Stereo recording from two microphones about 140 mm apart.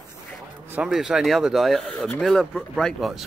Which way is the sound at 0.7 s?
5° right (ahead or behind).